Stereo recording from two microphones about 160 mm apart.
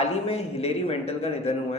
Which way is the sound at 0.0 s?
40° left (ahead or behind).